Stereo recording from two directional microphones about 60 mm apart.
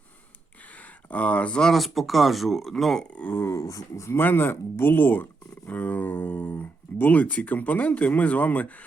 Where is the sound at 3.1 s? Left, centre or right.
Left.